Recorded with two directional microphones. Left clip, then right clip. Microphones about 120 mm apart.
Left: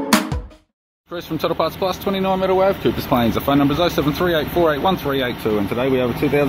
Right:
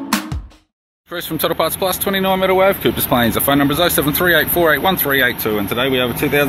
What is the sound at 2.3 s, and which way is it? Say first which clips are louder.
Speech: right 3 dB; 25° right (ahead or behind).